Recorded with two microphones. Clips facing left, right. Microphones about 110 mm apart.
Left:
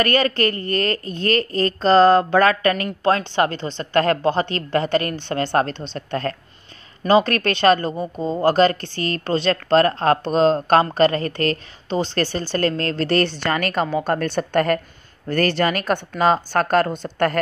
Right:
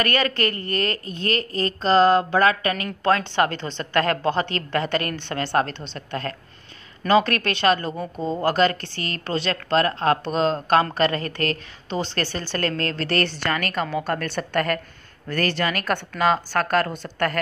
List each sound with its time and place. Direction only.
0.0 s a woman's voice: 35° left (ahead or behind)
3.1 s a woman's voice: 25° left (ahead or behind)
5.4 s a woman's voice: 40° left (ahead or behind)
7.0 s a woman's voice: 30° left (ahead or behind)
8.0 s speech: 10° left (ahead or behind)
8.4 s a woman's voice: 30° left (ahead or behind)